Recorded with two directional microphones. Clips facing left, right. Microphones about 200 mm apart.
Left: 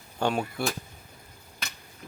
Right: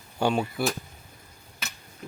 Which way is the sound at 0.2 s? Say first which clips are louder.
Right 2 dB; 10° right (ahead or behind).